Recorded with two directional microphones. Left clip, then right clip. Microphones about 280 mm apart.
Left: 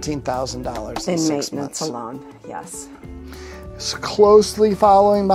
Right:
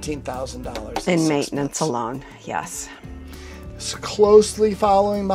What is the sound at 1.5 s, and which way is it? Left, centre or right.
Speech, right.